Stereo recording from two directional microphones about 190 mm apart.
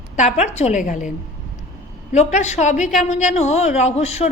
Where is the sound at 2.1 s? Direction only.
35° left (ahead or behind).